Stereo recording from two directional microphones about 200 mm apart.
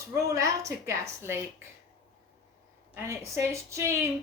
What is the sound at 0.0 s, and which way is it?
A woman's voice, 15° right (ahead or behind).